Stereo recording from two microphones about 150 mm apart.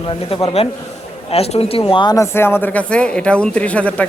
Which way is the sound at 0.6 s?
45° left (ahead or behind).